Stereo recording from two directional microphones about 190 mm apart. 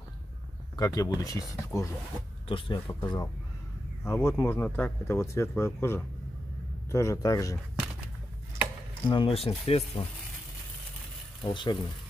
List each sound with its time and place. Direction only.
0.7 s speech: 15° left (ahead or behind)
9.1 s speech: 25° left (ahead or behind)
11.4 s speech: 25° left (ahead or behind)